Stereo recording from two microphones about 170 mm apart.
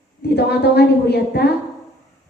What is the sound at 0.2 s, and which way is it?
A woman's voice, 70° left (ahead or behind).